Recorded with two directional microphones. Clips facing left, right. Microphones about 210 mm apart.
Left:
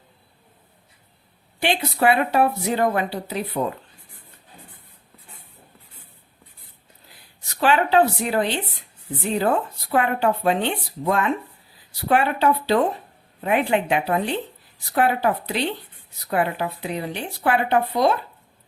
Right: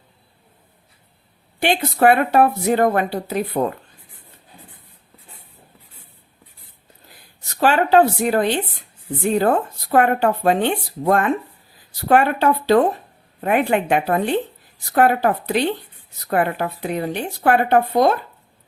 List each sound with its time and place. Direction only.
1.5 s speech: 50° right (ahead or behind)
7.6 s speech: 45° right (ahead or behind)